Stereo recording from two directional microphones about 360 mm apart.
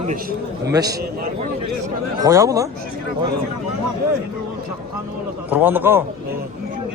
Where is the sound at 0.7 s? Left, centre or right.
Centre.